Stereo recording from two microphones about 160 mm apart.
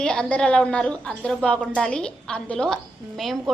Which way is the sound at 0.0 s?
5° left (ahead or behind).